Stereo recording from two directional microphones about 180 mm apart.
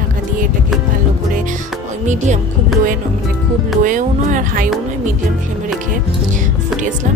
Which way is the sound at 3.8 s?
45° right (ahead or behind).